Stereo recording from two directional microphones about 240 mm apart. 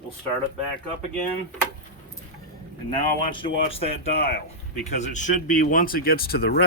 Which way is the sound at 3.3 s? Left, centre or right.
Left.